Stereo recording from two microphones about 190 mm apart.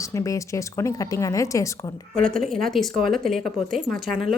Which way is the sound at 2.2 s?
5° left (ahead or behind).